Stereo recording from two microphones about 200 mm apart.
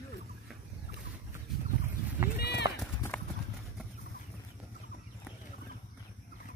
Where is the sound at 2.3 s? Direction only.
55° left (ahead or behind).